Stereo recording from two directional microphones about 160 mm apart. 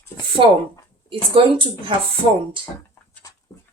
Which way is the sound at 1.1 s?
30° right (ahead or behind).